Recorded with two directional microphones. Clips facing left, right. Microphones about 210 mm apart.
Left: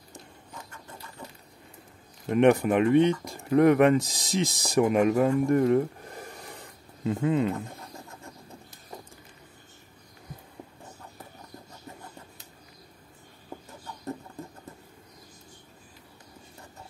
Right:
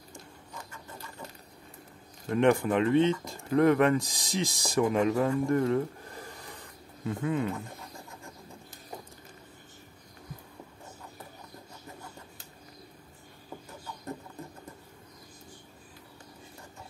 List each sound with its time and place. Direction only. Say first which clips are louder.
2.2 s speech: left 4 dB; 20° left (ahead or behind)